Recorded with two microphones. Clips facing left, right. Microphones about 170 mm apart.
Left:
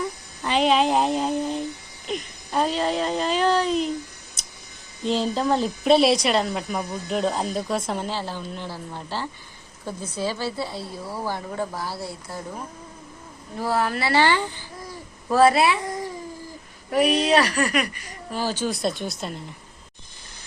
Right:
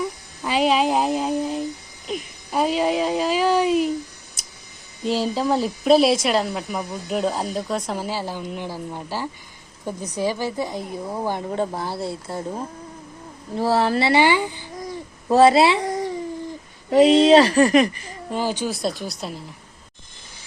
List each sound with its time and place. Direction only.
0.0 s a sound: 5° right (ahead or behind)
5.0 s speech: 5° right (ahead or behind)
15.3 s a child's voice: 25° right (ahead or behind)
18.7 s speech: centre (ahead or behind)